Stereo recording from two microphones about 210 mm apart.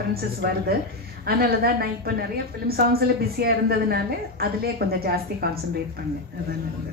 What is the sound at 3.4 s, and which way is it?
A woman's voice, 50° right (ahead or behind).